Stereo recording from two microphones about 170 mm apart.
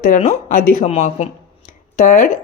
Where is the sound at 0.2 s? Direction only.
45° left (ahead or behind).